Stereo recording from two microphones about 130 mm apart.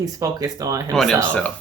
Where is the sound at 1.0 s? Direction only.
5° left (ahead or behind).